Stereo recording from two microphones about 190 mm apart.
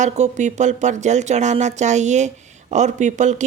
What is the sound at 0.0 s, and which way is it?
Speech, 40° right (ahead or behind).